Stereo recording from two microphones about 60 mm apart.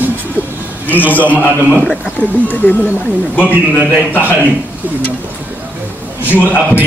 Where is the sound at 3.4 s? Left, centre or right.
Right.